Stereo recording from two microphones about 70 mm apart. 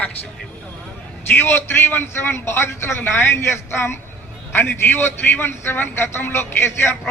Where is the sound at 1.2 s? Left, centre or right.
Left.